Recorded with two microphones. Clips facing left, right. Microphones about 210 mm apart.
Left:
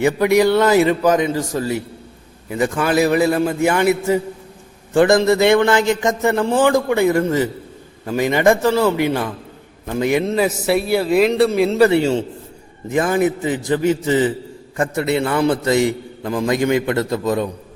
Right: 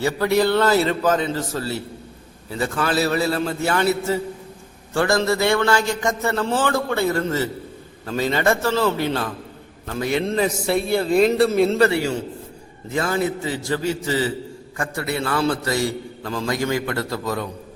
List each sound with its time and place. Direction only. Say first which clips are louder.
0.0 s a man's voice: left 5 dB; 15° left (ahead or behind)
11.8 s a man's voice: left 5 dB; 20° left (ahead or behind)